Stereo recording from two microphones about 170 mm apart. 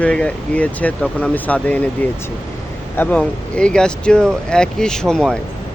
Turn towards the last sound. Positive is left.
turn(degrees=5)  # may be behind; listen again after turning